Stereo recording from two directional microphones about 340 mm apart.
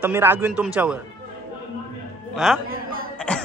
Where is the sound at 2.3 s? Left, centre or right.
Centre.